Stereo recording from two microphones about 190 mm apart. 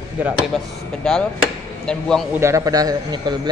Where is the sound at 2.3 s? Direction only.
15° right (ahead or behind).